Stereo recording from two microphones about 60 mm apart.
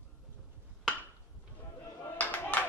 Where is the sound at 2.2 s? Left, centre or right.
Left.